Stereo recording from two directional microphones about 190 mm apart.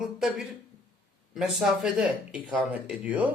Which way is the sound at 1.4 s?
5° right (ahead or behind).